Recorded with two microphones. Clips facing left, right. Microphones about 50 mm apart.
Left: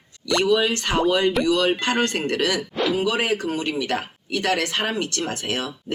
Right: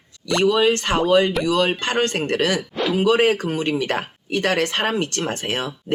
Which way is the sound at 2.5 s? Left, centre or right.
Centre.